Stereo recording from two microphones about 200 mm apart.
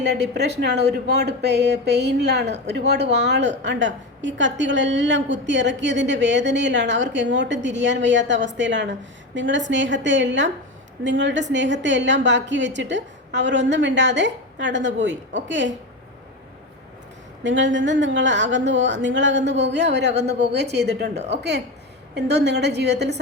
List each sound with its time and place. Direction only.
0.0 s a woman's voice: 55° right (ahead or behind)
17.4 s a woman's voice: 65° right (ahead or behind)